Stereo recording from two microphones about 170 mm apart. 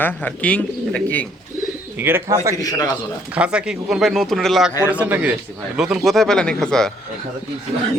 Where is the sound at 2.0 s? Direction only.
15° right (ahead or behind).